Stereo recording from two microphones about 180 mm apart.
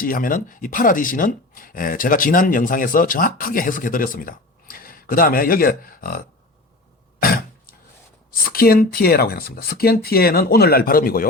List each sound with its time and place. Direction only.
0.0 s speech: 50° left (ahead or behind)
7.2 s throat clearing: 55° left (ahead or behind)
8.3 s speech: 55° left (ahead or behind)